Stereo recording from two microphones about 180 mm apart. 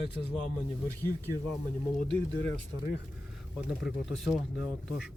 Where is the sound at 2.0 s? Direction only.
25° right (ahead or behind).